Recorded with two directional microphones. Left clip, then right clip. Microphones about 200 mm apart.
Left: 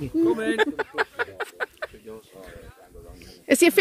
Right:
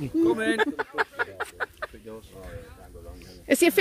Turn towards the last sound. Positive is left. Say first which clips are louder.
# left 3 dB
turn(degrees=15)  # may be behind; listen again after turning